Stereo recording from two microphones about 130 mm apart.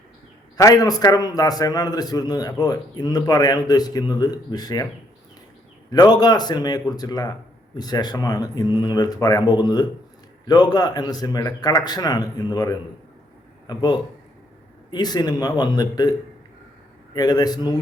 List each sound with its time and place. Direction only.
0.5 s a man's voice: 30° left (ahead or behind)
5.9 s a man's voice: 30° left (ahead or behind)
17.2 s a man's voice: 30° left (ahead or behind)